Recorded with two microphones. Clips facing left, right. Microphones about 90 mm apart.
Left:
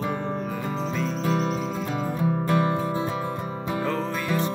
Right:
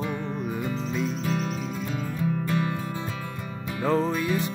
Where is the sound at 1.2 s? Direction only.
35° left (ahead or behind).